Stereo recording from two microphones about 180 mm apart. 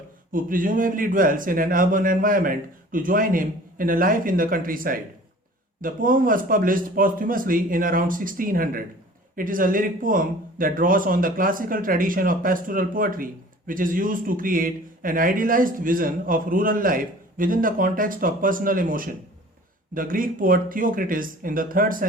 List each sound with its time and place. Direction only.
0.3 s speech: 50° right (ahead or behind)